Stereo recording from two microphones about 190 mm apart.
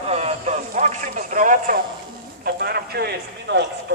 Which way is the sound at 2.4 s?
55° right (ahead or behind).